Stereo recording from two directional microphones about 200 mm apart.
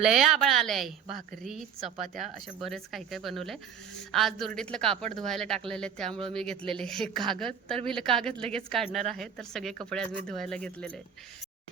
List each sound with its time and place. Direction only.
0.0 s a woman's voice: centre (ahead or behind)
6.1 s speech: 25° right (ahead or behind)
6.3 s a woman's voice: 5° left (ahead or behind)